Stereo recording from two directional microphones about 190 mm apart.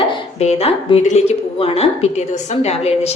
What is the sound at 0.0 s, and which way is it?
A woman's voice, 30° left (ahead or behind).